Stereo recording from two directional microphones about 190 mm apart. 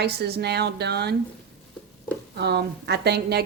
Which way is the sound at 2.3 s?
60° right (ahead or behind).